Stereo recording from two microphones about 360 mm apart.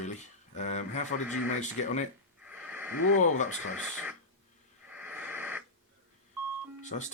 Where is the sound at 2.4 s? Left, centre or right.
Centre.